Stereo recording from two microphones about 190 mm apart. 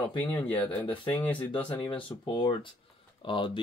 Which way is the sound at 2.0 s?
25° left (ahead or behind).